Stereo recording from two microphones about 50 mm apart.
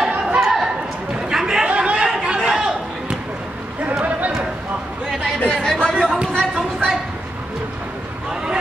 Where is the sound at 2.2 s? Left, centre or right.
Centre.